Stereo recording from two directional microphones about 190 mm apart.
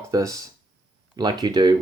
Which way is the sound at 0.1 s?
15° right (ahead or behind).